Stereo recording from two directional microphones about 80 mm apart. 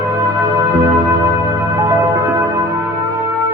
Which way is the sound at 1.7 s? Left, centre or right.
Right.